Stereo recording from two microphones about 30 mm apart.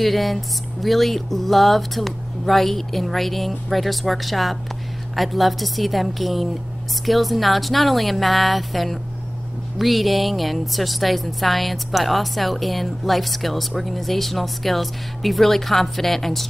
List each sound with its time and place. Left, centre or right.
0.0 s a woman's voice: centre